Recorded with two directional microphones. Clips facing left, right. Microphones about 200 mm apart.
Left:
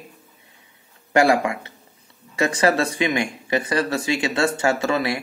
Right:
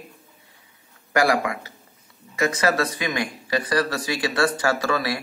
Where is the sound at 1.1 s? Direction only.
25° left (ahead or behind).